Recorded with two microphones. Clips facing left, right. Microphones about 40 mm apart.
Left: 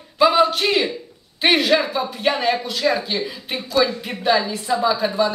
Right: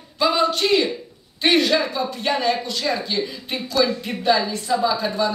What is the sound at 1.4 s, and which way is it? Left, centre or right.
Speech, centre.